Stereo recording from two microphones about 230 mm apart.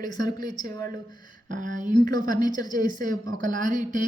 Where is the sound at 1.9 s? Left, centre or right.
Centre.